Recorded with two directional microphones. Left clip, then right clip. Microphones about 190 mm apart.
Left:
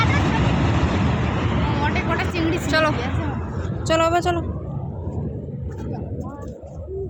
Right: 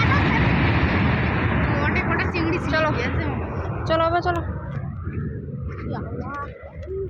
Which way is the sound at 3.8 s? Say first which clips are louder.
Left 2 dB; 30° left (ahead or behind).